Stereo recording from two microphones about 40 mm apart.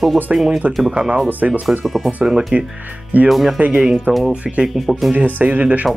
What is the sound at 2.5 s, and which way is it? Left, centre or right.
Speech, right.